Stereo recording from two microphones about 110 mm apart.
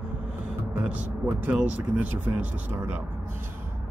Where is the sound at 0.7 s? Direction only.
15° right (ahead or behind).